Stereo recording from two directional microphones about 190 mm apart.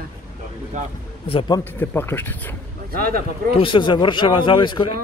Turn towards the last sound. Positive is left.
turn(degrees=25)  # may be behind; listen again after turning